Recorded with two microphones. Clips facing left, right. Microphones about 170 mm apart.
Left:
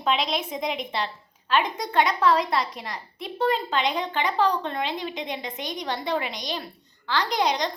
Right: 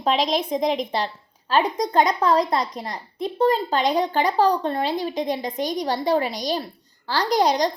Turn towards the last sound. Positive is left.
turn(degrees=-40)  # may be behind; listen again after turning